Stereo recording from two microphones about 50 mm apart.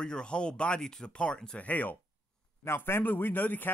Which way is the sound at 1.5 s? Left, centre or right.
Left.